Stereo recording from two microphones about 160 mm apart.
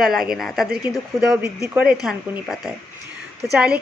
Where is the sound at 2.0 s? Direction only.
Centre (ahead or behind).